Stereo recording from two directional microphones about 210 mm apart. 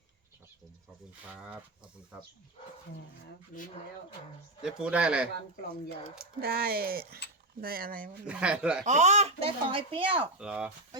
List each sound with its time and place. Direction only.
1.3 s speech: 5° right (ahead or behind)
3.5 s speech: 40° left (ahead or behind)
4.6 s speech: 5° right (ahead or behind)
6.4 s speech: 45° right (ahead or behind)
8.3 s speech: 5° right (ahead or behind)
8.8 s speech: 35° right (ahead or behind)
10.3 s speech: 5° right (ahead or behind)